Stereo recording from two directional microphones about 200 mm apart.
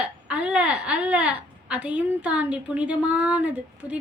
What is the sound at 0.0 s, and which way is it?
A woman's voice, 5° right (ahead or behind).